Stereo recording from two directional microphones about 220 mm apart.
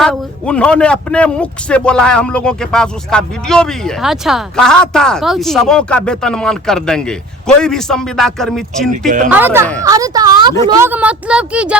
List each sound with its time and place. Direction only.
0.0 s a man's voice: 5° left (ahead or behind)
8.9 s speech: 35° right (ahead or behind)
9.3 s a man's voice: 10° right (ahead or behind)